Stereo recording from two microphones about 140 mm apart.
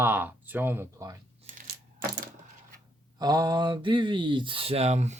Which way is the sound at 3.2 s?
30° right (ahead or behind).